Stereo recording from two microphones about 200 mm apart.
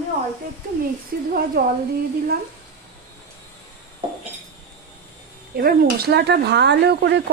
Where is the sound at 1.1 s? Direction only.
50° right (ahead or behind).